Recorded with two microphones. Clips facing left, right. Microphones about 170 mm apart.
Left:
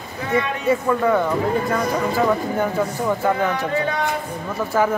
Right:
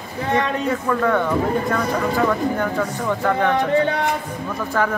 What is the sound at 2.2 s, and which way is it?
Speech, 15° left (ahead or behind).